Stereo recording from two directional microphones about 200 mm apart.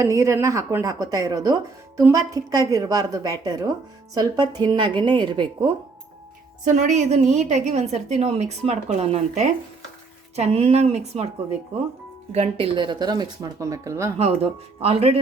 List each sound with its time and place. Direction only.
0.0 s speech: 15° right (ahead or behind)
6.7 s a woman's voice: 35° right (ahead or behind)
12.3 s speech: 30° right (ahead or behind)
14.8 s speech: 30° right (ahead or behind)